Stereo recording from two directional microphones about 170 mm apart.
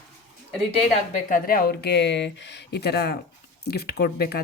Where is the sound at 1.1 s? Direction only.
55° left (ahead or behind).